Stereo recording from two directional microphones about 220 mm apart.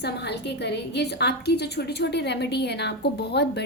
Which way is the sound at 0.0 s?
50° left (ahead or behind).